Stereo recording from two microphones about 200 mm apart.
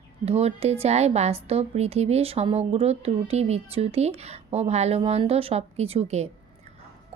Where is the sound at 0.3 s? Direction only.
30° right (ahead or behind).